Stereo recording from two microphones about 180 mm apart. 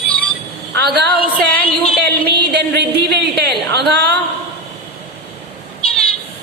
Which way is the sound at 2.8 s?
70° right (ahead or behind).